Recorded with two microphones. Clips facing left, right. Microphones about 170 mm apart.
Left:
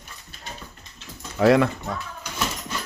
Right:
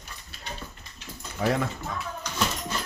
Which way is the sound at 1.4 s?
80° left.